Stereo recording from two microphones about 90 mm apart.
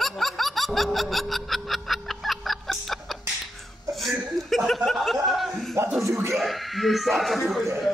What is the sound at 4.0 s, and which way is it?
Chuckle, centre (ahead or behind).